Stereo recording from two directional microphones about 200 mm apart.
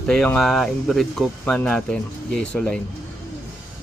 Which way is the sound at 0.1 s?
5° left (ahead or behind).